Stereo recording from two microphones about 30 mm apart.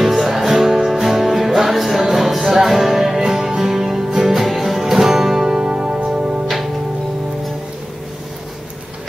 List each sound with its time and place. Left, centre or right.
0.0 s music: centre
5.4 s music: right
6.4 s music: centre